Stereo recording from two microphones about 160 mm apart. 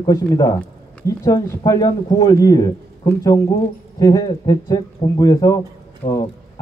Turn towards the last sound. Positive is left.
turn(degrees=45)  # may be behind; listen again after turning